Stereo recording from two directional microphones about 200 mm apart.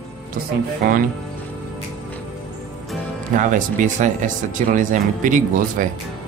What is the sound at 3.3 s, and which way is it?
Speech, 40° right (ahead or behind).